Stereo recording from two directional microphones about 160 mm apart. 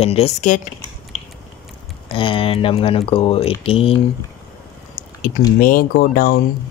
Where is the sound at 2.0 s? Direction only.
35° left (ahead or behind).